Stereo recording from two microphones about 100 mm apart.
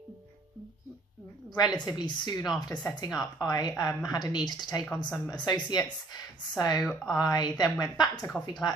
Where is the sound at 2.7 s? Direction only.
35° left (ahead or behind).